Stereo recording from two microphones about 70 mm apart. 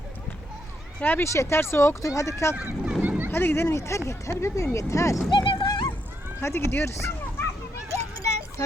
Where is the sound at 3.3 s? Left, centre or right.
Left.